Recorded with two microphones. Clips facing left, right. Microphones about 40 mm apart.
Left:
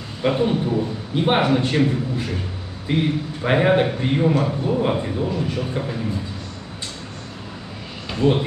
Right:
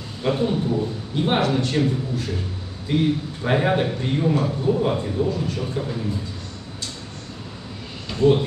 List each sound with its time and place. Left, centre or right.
0.2 s a man's voice: left
8.1 s speech: centre